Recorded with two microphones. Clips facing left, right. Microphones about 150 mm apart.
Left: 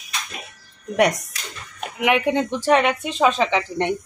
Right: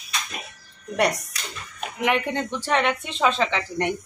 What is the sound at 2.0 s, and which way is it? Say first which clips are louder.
A man's voice: left 5 dB; 10° left (ahead or behind).